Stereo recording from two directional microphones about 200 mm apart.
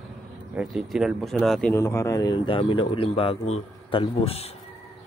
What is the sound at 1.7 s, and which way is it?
Speech, 15° left (ahead or behind).